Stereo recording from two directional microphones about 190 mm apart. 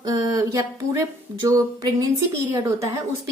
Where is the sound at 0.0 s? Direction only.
20° right (ahead or behind).